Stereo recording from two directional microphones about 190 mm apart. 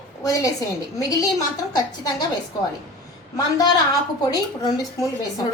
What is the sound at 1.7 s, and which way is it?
Speech, 20° left (ahead or behind).